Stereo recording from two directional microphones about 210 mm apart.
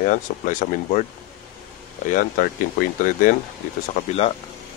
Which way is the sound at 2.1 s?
40° left (ahead or behind).